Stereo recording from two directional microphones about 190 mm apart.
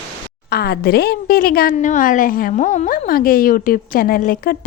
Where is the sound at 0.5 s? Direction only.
55° left (ahead or behind).